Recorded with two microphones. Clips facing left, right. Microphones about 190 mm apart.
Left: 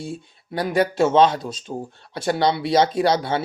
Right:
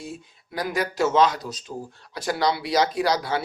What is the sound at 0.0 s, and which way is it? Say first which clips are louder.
Speech: left 5 dB; 30° left (ahead or behind).